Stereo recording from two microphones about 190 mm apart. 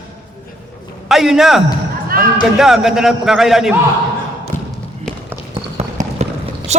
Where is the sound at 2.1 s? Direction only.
50° right (ahead or behind).